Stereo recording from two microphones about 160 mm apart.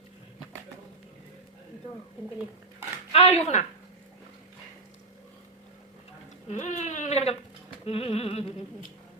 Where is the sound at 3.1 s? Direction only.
40° left (ahead or behind).